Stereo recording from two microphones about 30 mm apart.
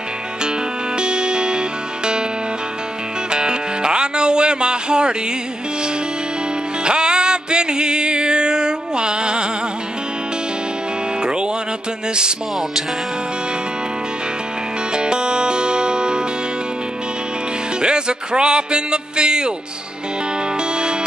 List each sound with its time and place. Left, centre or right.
0.9 s music: right
3.3 s music: right
6.8 s music: right
11.2 s music: right
15.0 s music: right
17.8 s music: right